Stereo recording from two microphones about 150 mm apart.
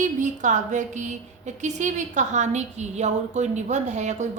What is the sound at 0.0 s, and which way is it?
A woman's voice, 55° right (ahead or behind).